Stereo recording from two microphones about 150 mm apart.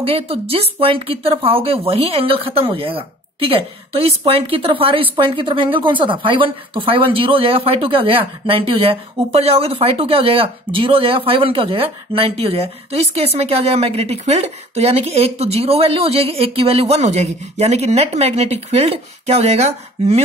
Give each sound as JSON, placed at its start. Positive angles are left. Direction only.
{"t": 0.0, "sound": "speech", "side_deg": -40}